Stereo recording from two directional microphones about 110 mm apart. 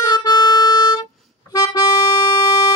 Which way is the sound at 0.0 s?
40° left (ahead or behind).